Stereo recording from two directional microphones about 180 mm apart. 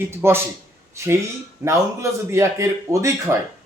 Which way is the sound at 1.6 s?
15° right (ahead or behind).